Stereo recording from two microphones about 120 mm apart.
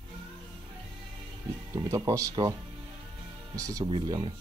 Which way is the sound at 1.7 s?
30° right (ahead or behind).